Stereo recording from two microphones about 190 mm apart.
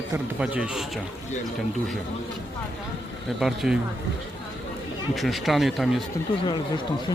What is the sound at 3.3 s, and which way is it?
Speech, centre (ahead or behind).